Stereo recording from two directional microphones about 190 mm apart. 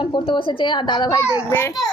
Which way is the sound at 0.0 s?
25° left (ahead or behind).